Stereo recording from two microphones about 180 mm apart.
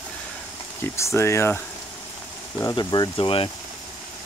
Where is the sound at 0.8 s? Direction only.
15° left (ahead or behind); by 3.5 s 30° left (ahead or behind).